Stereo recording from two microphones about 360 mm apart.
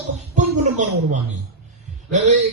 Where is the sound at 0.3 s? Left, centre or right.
Centre.